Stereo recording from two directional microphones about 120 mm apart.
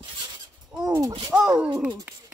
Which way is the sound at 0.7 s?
5° right (ahead or behind).